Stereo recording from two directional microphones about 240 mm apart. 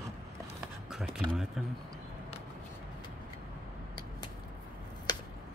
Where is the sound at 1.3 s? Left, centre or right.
Centre.